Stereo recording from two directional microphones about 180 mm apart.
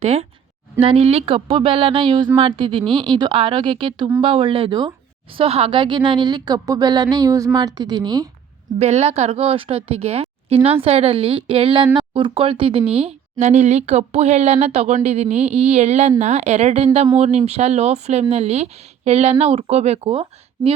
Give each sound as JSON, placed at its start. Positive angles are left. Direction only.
{"t": 0.0, "sound": "speech", "side_deg": -35}
{"t": 8.8, "sound": "speech", "side_deg": -40}